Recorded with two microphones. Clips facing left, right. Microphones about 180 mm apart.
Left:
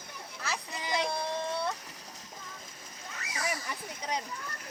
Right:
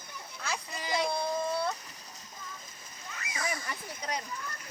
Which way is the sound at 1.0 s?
Centre (ahead or behind).